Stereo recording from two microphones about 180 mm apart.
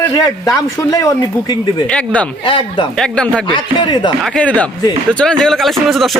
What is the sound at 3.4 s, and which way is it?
Speech, 25° left (ahead or behind).